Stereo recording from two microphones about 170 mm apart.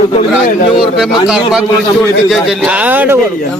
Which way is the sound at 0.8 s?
Centre (ahead or behind).